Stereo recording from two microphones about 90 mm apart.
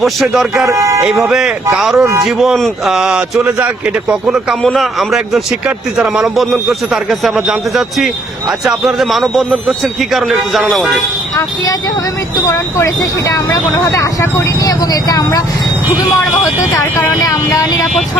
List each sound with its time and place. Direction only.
0.0 s a man's voice: centre (ahead or behind)
0.7 s speech: 35° right (ahead or behind)
1.2 s a man's voice: 5° right (ahead or behind)
2.0 s speech: 30° right (ahead or behind)
2.2 s a man's voice: centre (ahead or behind)
4.6 s a man's voice: centre (ahead or behind)
11.3 s speech: 45° left (ahead or behind)
17.2 s speech: 40° left (ahead or behind)